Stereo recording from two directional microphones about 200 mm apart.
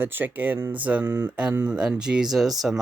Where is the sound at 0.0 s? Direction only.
10° right (ahead or behind).